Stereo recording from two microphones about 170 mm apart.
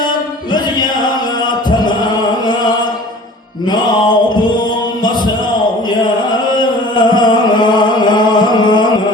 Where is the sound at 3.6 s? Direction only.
25° left (ahead or behind).